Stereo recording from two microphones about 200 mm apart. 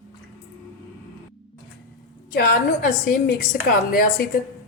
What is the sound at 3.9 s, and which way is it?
Speech, 50° left (ahead or behind).